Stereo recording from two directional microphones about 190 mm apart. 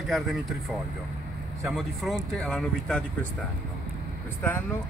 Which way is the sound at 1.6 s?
Centre (ahead or behind).